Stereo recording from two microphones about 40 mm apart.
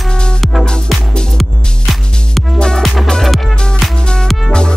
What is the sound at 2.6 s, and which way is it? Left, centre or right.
Music, centre.